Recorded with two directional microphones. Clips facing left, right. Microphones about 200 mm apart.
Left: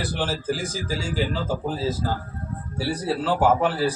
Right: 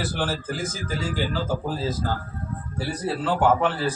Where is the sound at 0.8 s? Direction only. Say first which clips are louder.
Even; 30° left (ahead or behind).